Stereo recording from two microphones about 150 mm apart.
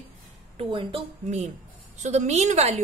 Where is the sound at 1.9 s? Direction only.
55° right (ahead or behind).